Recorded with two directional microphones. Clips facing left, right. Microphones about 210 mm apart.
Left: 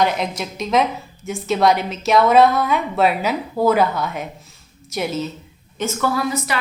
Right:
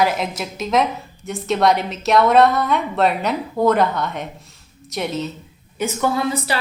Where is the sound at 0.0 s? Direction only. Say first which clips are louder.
Even; 5° right (ahead or behind).